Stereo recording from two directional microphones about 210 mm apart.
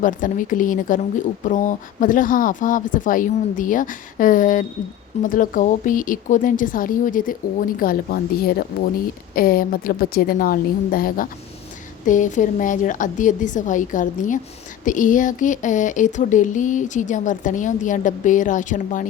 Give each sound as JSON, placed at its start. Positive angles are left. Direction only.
{"t": 0.0, "sound": "a woman's voice", "side_deg": 40}